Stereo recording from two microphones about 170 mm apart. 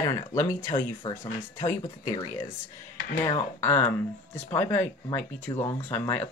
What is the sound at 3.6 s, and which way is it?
Speech, 10° left (ahead or behind).